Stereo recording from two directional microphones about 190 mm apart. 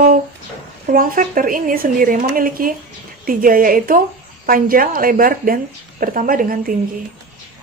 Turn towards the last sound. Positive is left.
turn(degrees=-45)  # may be behind; listen again after turning